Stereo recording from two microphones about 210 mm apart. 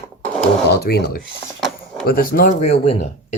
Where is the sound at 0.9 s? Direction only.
45° left (ahead or behind).